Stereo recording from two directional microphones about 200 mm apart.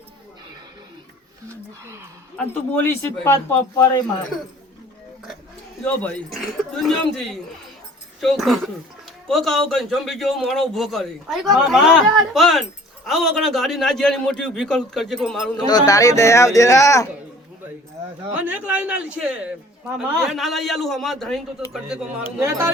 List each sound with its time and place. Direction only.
2.4 s speech: 5° left (ahead or behind)
5.8 s a man's voice: 5° left (ahead or behind)
15.5 s speech: 20° left (ahead or behind)
18.3 s a man's voice: 5° right (ahead or behind)
22.4 s speech: 15° right (ahead or behind)